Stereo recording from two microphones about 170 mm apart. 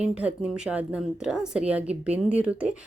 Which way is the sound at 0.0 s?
5° right (ahead or behind).